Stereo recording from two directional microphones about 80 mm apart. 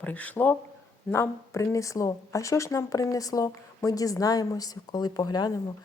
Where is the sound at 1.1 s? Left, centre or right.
Left.